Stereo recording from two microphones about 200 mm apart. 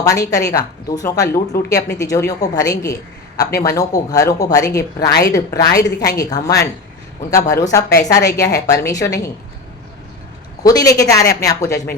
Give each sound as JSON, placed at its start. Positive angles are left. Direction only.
{"t": 0.0, "sound": "a woman's voice", "side_deg": 15}
{"t": 10.6, "sound": "a woman's voice", "side_deg": 20}